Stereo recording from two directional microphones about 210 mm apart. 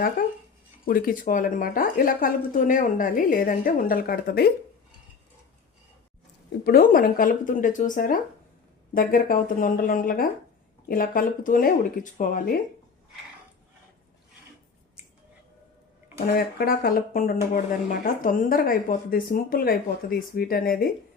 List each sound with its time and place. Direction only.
0.2 s a sound: 40° left (ahead or behind)
0.9 s speech: 45° left (ahead or behind)
6.7 s speech: 45° left (ahead or behind)
16.1 s speech: 45° left (ahead or behind)